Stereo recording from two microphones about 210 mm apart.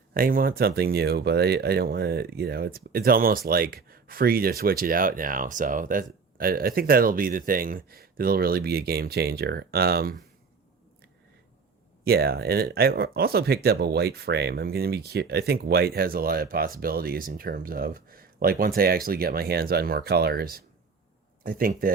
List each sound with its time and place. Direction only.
0.1 s speech: 45° right (ahead or behind)
12.0 s speech: 50° right (ahead or behind)